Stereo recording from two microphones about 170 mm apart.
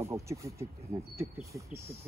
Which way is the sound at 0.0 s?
15° right (ahead or behind).